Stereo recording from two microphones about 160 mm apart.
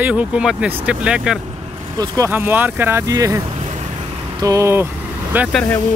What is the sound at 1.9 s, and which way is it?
Speech, 25° right (ahead or behind).